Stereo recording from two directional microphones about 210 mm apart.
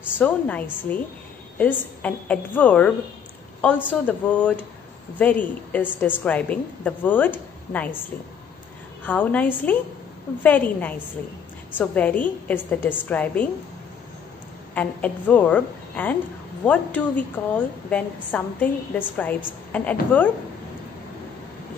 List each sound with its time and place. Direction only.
0.2 s a woman's voice: 5° left (ahead or behind)
9.0 s a woman's voice: 5° left (ahead or behind)
14.7 s a woman's voice: 5° left (ahead or behind)